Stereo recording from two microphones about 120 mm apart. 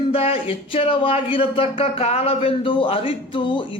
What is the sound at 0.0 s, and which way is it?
Speech, 55° left (ahead or behind).